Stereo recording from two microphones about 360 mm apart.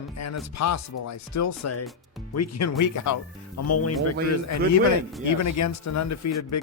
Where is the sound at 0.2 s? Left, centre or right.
Left.